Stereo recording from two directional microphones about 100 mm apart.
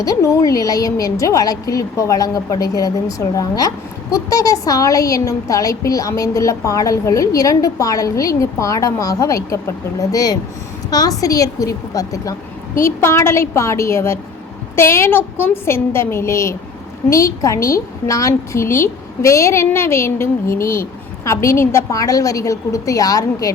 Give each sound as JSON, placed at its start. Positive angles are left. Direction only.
{"t": 0.0, "sound": "a woman's voice", "side_deg": 35}